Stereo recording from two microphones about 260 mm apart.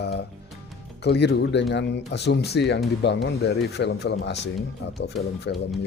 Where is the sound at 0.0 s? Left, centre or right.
Left.